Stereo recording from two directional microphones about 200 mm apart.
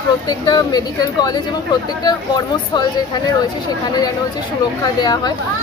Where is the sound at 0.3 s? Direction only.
20° left (ahead or behind).